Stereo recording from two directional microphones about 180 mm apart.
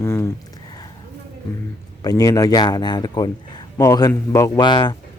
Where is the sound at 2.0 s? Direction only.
20° left (ahead or behind).